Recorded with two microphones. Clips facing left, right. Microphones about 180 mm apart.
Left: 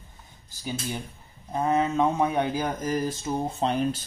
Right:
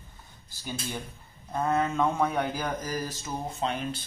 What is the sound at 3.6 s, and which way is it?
Speech, 40° left (ahead or behind).